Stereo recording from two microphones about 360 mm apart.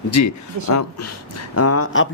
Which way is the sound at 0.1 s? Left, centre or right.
Left.